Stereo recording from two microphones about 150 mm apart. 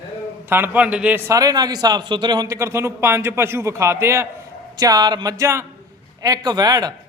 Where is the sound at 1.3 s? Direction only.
25° right (ahead or behind).